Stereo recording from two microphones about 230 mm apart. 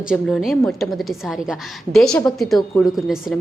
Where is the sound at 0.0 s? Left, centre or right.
Centre.